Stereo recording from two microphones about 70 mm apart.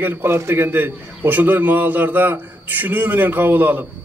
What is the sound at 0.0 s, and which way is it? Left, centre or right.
A man's voice, right.